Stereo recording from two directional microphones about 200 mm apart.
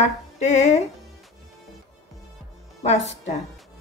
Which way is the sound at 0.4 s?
35° left (ahead or behind).